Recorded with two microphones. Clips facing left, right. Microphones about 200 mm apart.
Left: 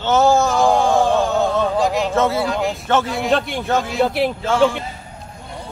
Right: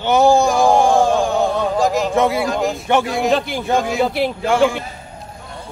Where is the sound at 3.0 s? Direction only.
45° right (ahead or behind).